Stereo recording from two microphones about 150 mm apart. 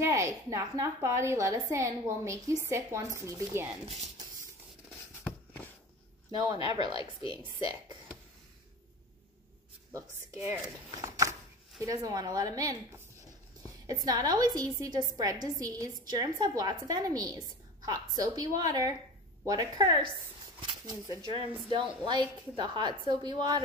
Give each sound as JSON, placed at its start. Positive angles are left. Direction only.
{"t": 0.0, "sound": "a woman's voice", "side_deg": -20}
{"t": 3.8, "sound": "speech", "side_deg": -50}
{"t": 6.3, "sound": "a woman's voice", "side_deg": -25}
{"t": 7.0, "sound": "a woman's voice", "side_deg": 35}
{"t": 10.4, "sound": "a woman's voice", "side_deg": -15}
{"t": 13.8, "sound": "a woman's voice", "side_deg": -25}